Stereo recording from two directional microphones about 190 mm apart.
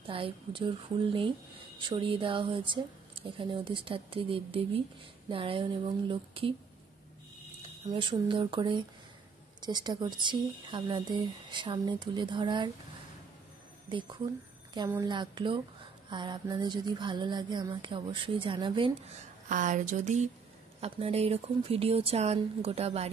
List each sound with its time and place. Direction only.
0.0 s speech: 25° right (ahead or behind)
7.9 s speech: 25° right (ahead or behind)
13.8 s speech: 25° right (ahead or behind)
19.5 s speech: 40° right (ahead or behind)